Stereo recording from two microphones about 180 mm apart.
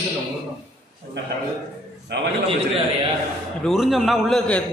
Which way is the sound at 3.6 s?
Centre (ahead or behind).